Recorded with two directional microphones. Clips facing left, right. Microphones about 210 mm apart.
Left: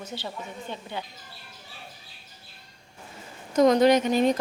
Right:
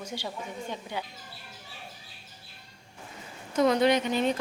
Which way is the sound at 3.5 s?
40° left (ahead or behind).